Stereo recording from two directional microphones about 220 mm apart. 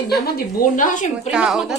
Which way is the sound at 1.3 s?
Centre (ahead or behind).